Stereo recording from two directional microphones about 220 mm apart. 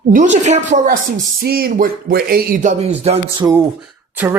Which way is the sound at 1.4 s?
45° right (ahead or behind).